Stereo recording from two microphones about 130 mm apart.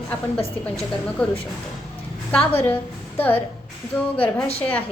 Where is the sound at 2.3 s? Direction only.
10° left (ahead or behind).